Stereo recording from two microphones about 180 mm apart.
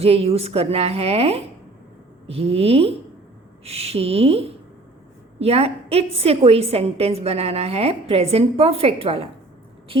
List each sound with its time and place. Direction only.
0.0 s a woman's voice: 35° right (ahead or behind)